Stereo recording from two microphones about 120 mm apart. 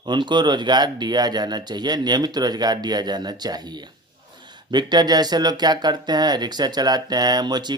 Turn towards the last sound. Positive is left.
turn(degrees=-35)  # may be behind; listen again after turning